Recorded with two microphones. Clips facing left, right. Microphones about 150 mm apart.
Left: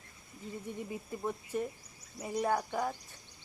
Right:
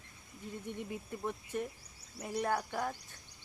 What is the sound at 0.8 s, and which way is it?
Speech, 5° left (ahead or behind).